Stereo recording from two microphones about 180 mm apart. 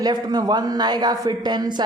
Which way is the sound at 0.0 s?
20° right (ahead or behind).